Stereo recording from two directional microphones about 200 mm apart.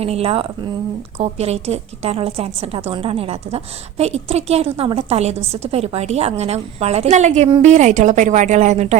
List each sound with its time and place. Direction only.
0.0 s a woman's voice: 30° right (ahead or behind)